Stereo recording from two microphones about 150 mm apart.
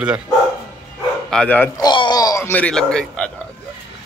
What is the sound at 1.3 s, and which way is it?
Speech, 5° left (ahead or behind).